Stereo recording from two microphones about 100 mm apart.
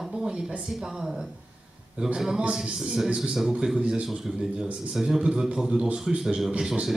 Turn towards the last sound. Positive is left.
turn(degrees=-5)  # may be behind; listen again after turning